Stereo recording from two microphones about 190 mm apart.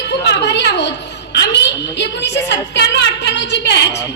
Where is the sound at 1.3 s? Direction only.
65° left (ahead or behind).